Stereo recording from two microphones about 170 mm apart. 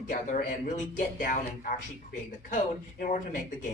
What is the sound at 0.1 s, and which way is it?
Speech, 50° left (ahead or behind).